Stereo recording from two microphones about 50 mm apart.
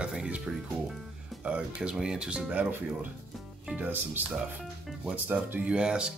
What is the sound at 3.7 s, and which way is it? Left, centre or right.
Speech, right.